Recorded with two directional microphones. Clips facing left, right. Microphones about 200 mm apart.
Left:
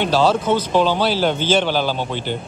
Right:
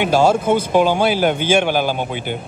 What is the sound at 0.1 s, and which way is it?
Speech, 50° right (ahead or behind).